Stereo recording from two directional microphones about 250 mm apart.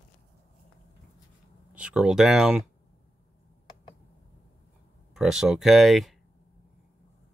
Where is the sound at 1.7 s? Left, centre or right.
Centre.